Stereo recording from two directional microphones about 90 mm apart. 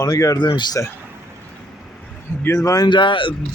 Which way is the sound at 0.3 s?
55° left (ahead or behind).